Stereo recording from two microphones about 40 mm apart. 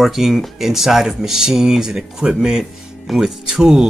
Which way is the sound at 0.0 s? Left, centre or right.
Centre.